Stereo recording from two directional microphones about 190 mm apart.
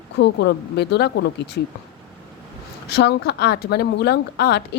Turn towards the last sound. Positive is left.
turn(degrees=60)  # may be behind; listen again after turning